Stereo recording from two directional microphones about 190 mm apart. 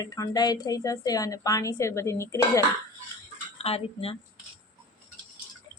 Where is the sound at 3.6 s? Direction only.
30° left (ahead or behind).